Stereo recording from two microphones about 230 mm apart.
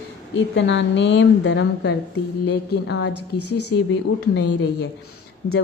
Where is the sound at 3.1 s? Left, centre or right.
Left.